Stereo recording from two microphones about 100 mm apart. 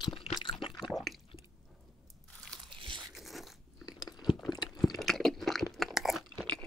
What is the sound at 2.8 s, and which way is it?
Biting, 55° right (ahead or behind).